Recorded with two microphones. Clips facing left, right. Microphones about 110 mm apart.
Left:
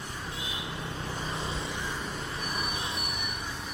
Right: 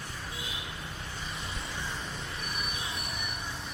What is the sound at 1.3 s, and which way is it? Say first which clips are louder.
Vehicle: left 5 dB; 25° left (ahead or behind).